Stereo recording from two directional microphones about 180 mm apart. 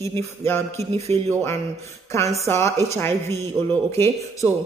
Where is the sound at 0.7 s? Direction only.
35° right (ahead or behind).